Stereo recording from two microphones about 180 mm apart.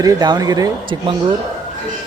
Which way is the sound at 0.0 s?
20° right (ahead or behind).